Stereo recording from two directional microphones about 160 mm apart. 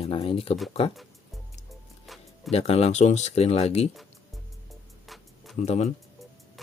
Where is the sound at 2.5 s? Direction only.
40° left (ahead or behind).